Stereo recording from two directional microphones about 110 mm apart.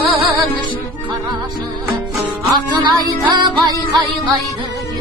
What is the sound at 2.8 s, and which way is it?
Music, 40° right (ahead or behind).